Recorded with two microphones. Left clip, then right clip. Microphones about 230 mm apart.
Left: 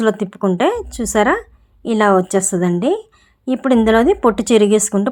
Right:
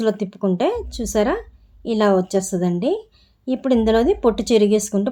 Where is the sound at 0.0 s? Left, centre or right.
Centre.